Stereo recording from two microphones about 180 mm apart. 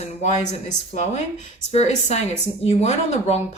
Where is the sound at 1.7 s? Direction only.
35° left (ahead or behind).